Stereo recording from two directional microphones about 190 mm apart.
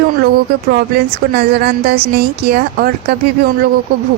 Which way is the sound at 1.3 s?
60° right (ahead or behind).